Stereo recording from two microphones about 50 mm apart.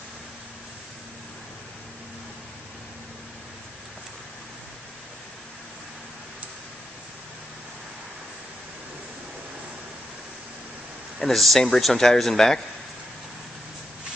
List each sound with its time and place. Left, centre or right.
11.1 s speech: centre